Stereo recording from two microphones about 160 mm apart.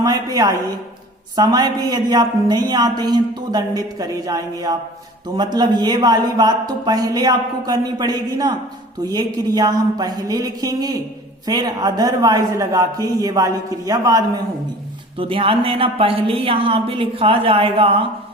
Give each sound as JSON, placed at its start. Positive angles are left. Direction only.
{"t": 0.0, "sound": "a woman's voice", "side_deg": -25}
{"t": 15.2, "sound": "a woman's voice", "side_deg": -35}